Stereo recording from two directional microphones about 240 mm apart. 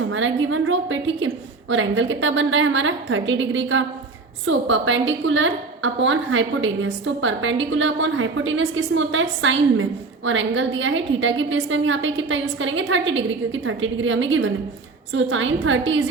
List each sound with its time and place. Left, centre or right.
0.1 s a woman's voice: right